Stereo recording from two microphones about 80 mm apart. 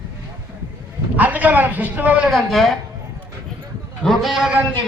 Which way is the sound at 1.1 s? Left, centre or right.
Centre.